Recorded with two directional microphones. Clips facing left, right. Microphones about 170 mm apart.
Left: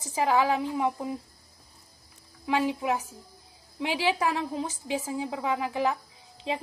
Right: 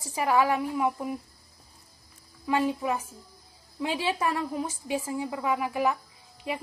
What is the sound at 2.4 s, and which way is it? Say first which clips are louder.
Speech: right 1 dB; 15° left (ahead or behind).